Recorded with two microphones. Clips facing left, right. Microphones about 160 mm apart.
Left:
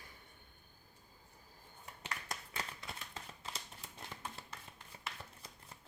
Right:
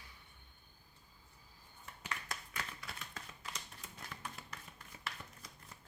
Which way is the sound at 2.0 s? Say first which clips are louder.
Even; 25° left (ahead or behind).